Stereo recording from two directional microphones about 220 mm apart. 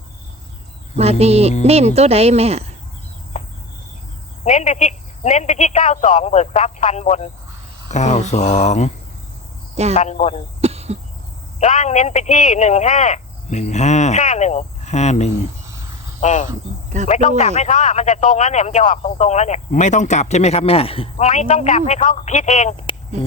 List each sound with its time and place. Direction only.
1.2 s speech: 30° right (ahead or behind)
3.3 s cricket: 35° left (ahead or behind)
4.4 s a man's voice: 30° left (ahead or behind)
9.9 s a man's voice: 30° left (ahead or behind)
10.6 s cough: 30° right (ahead or behind)
11.6 s a man's voice: 30° left (ahead or behind)